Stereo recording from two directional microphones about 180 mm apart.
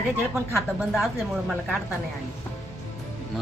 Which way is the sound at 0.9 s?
Centre (ahead or behind).